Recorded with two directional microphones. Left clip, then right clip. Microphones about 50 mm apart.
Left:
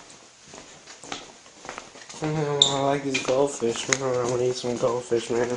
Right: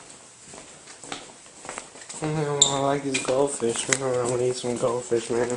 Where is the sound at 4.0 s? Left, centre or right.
Centre.